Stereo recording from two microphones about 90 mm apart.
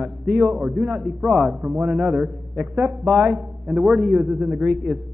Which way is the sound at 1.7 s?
15° right (ahead or behind).